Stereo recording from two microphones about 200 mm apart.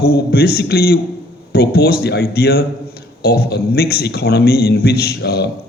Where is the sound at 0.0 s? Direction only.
50° left (ahead or behind).